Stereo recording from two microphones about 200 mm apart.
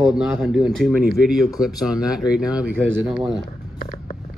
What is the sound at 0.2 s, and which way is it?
Speech, 5° right (ahead or behind).